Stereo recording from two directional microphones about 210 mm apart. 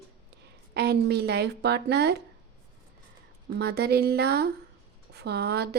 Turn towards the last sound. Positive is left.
turn(degrees=-50)  # may be behind; listen again after turning